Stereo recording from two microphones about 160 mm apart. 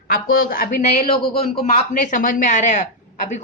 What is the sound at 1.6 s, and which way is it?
A woman's voice, 50° left (ahead or behind).